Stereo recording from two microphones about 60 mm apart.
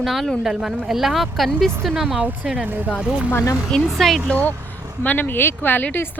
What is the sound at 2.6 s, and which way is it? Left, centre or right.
Speech, right.